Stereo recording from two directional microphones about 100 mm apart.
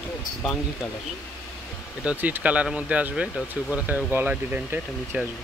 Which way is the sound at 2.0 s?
15° right (ahead or behind).